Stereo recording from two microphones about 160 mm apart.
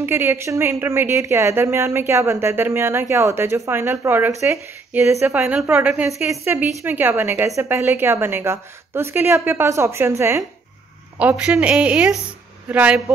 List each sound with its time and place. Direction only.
0.0 s speech: 15° right (ahead or behind)
6.3 s speech: 15° right (ahead or behind)